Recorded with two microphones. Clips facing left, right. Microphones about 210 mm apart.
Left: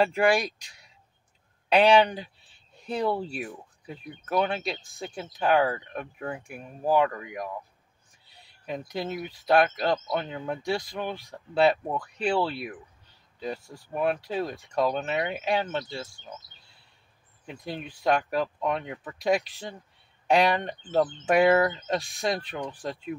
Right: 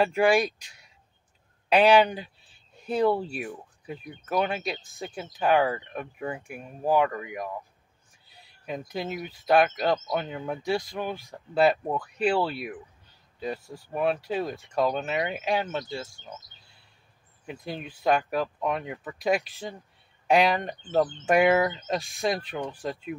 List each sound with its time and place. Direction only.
0.0 s speech: centre (ahead or behind)
1.7 s speech: 5° right (ahead or behind)
8.6 s speech: 5° right (ahead or behind)
17.5 s speech: centre (ahead or behind)